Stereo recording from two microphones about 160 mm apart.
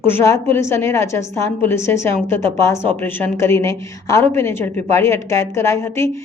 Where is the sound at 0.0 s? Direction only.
15° left (ahead or behind).